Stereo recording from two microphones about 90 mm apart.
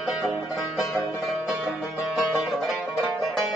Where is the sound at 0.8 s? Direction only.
Centre (ahead or behind).